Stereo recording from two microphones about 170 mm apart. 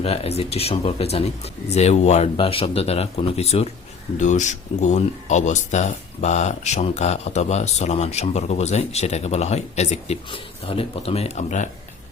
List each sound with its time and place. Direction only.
0.0 s speech: 35° left (ahead or behind)